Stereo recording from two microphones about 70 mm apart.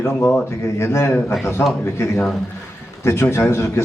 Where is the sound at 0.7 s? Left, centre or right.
Left.